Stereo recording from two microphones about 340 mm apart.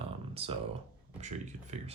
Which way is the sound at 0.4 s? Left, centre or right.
Centre.